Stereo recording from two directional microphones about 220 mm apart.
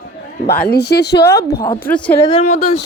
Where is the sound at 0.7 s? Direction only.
45° left (ahead or behind).